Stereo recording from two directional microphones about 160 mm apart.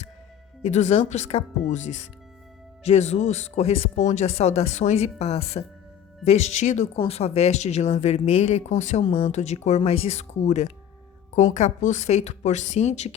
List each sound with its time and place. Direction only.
0.6 s speech: 45° left (ahead or behind)